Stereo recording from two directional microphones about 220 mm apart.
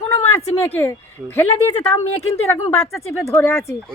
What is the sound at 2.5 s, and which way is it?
Speech, 15° left (ahead or behind).